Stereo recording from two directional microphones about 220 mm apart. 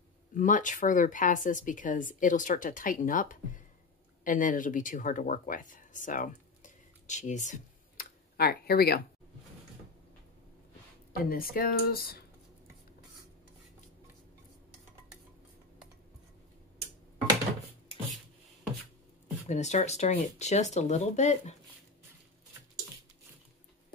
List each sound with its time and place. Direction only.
0.3 s speech: 35° left (ahead or behind)
11.2 s speech: 40° left (ahead or behind)
19.4 s speech: 30° left (ahead or behind)